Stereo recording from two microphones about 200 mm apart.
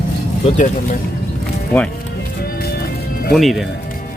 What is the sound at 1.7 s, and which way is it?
Speech, 10° left (ahead or behind).